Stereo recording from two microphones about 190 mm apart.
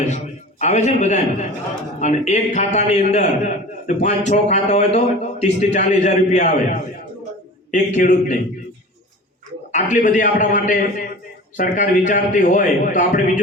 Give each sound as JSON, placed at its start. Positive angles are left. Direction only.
{"t": 0.6, "sound": "a man's voice", "side_deg": 35}
{"t": 7.7, "sound": "a man's voice", "side_deg": 40}
{"t": 9.7, "sound": "a man's voice", "side_deg": 40}